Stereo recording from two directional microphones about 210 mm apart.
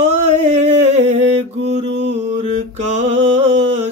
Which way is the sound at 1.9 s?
55° right (ahead or behind).